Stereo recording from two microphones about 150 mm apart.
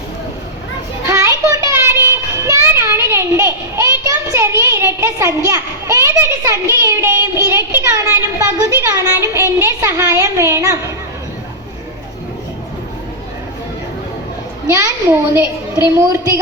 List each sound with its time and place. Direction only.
1.0 s child singing: 20° right (ahead or behind)
14.7 s a child's voice: 15° right (ahead or behind)